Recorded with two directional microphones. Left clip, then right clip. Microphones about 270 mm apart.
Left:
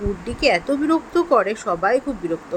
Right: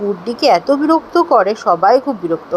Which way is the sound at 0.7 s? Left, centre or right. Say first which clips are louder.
Right 7 dB; centre.